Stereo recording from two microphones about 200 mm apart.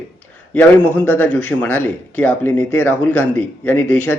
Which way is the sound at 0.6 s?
5° left (ahead or behind).